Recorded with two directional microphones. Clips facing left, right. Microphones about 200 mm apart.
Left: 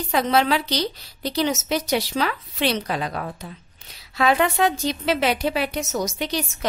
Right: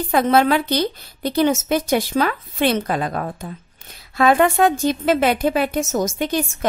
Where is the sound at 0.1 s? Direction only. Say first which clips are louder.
Right 4 dB; 50° right (ahead or behind).